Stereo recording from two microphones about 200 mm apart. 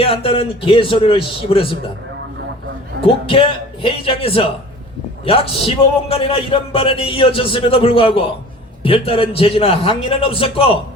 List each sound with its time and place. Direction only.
0.0 s a man's voice: 30° left (ahead or behind)
3.0 s a man's voice: 25° left (ahead or behind)